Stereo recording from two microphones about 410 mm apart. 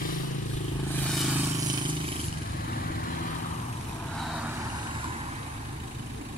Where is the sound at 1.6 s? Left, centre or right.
Centre.